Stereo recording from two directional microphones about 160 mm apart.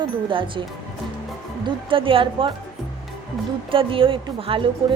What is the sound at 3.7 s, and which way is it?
Wind chime, 35° right (ahead or behind).